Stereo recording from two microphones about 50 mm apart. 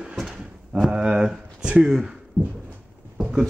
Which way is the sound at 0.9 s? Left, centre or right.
Centre.